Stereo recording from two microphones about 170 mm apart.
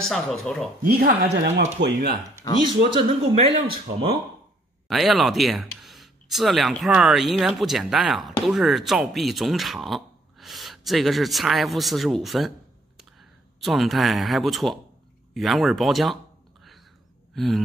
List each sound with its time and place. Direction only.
0.0 s speech: 5° left (ahead or behind)
0.8 s speech: 65° right (ahead or behind)
1.8 s speech: 80° right
2.6 s speech: 25° right (ahead or behind)
4.8 s speech: centre (ahead or behind)
17.3 s speech: centre (ahead or behind)